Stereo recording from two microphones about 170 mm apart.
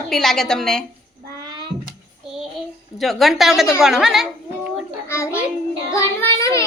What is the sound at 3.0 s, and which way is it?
A woman's voice, centre (ahead or behind).